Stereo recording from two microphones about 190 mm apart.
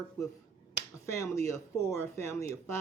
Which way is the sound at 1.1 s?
15° left (ahead or behind).